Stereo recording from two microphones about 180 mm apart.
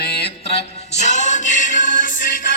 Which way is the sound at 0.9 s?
40° left (ahead or behind).